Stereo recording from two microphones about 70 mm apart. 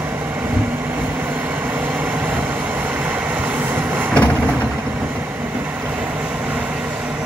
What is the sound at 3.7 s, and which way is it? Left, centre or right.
Vehicle, right.